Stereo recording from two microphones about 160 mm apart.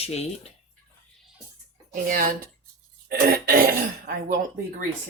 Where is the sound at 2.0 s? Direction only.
60° right (ahead or behind).